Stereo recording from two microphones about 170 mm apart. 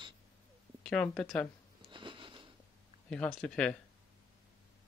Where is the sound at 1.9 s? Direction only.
30° right (ahead or behind).